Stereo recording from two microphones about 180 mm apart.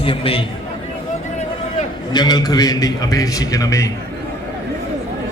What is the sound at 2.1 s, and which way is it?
A man's voice, 25° left (ahead or behind).